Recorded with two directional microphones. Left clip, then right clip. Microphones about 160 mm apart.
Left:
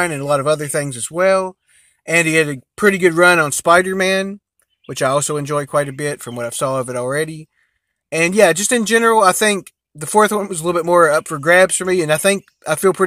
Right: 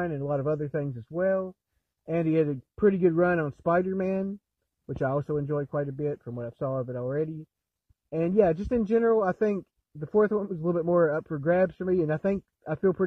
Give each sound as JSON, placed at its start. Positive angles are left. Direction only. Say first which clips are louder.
{"t": 0.0, "sound": "speech", "louder": "left 12 dB", "side_deg": 25}
{"t": 2.0, "sound": "speech", "louder": "left 11 dB", "side_deg": 15}